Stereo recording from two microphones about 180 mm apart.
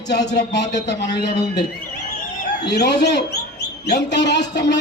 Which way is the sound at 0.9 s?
20° left (ahead or behind).